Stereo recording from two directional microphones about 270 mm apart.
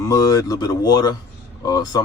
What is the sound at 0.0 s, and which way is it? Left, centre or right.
Speech, centre.